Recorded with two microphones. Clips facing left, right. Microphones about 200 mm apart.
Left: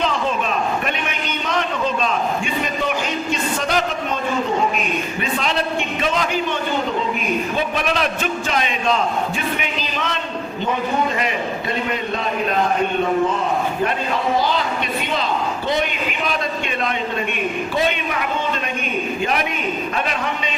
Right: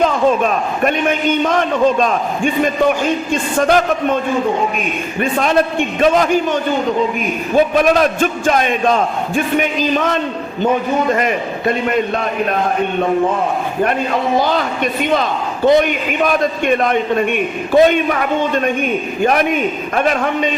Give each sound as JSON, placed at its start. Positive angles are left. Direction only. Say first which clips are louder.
{"t": 0.0, "sound": "a man's voice", "louder": "right 8 dB", "side_deg": -50}
{"t": 5.2, "sound": "a man's voice", "louder": "right 10 dB", "side_deg": -50}
{"t": 15.1, "sound": "a man's voice", "louder": "right 5 dB", "side_deg": -50}
{"t": 19.2, "sound": "a man's voice", "louder": "right 12 dB", "side_deg": -50}